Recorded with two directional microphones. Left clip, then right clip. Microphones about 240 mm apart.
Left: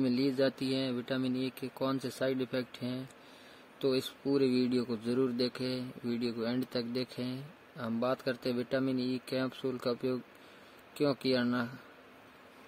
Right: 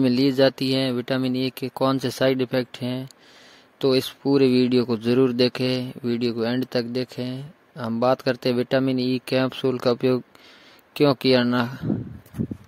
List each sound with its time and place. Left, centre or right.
0.0 s speech: right